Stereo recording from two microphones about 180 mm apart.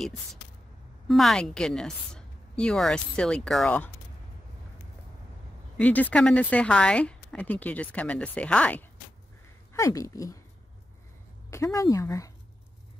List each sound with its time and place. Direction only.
1.0 s a woman's voice: centre (ahead or behind)
5.8 s speech: 10° left (ahead or behind)
9.8 s speech: 15° left (ahead or behind)
11.5 s speech: 15° left (ahead or behind)